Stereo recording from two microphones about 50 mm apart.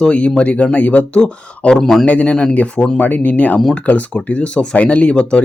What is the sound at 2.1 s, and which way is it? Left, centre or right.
Speech, left.